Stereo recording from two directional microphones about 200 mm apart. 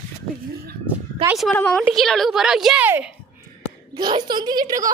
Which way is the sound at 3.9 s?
20° right (ahead or behind).